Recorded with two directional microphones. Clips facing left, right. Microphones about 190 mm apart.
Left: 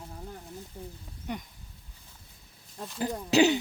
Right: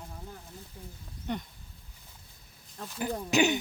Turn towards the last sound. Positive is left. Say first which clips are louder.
# left 4 dB
turn(degrees=35)  # may be behind; listen again after turning